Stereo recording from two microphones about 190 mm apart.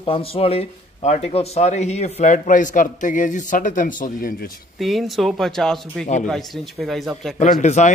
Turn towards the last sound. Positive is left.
turn(degrees=40)  # may be behind; listen again after turning